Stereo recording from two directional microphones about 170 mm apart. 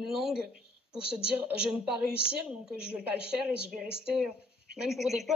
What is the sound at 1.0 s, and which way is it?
Speech, 35° left (ahead or behind).